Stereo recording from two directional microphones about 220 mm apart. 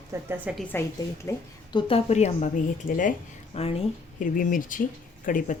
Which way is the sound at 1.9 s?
30° left (ahead or behind).